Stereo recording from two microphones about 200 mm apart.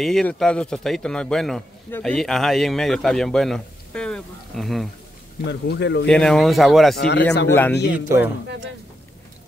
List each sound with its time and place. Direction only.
0.0 s a man's voice: 5° left (ahead or behind)
5.5 s speech: 60° left (ahead or behind)
6.0 s a man's voice: 5° left (ahead or behind)
7.0 s speech: 60° left (ahead or behind)
7.4 s a man's voice: 10° left (ahead or behind)
7.7 s speech: 60° left (ahead or behind)